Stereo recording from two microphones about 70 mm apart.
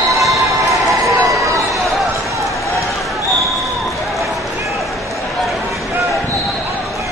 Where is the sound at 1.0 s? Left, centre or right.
Right.